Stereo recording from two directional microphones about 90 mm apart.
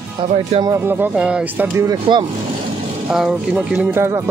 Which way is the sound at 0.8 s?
25° right (ahead or behind).